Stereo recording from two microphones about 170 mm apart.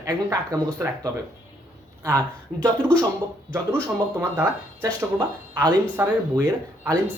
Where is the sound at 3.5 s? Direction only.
15° right (ahead or behind).